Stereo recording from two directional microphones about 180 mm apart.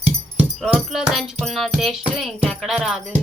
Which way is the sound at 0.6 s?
5° right (ahead or behind).